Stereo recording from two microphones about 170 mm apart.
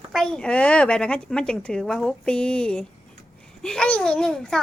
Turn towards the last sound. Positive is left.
turn(degrees=5)  # may be behind; listen again after turning